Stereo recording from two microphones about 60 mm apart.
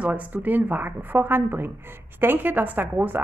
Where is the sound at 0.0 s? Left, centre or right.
Right.